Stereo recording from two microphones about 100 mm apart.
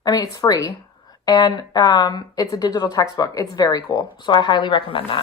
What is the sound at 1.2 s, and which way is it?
A woman's voice, 45° left (ahead or behind).